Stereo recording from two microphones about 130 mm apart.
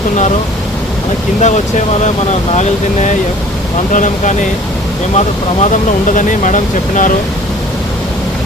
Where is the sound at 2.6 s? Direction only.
65° left (ahead or behind).